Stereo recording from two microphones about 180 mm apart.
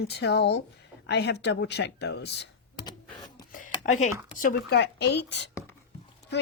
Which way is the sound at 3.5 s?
45° left (ahead or behind).